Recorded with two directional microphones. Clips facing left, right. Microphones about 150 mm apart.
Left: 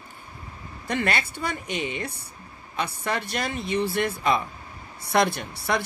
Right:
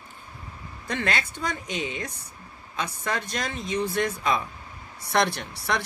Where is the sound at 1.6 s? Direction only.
60° left (ahead or behind).